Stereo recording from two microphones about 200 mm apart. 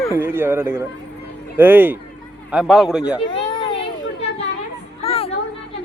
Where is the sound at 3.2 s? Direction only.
25° left (ahead or behind).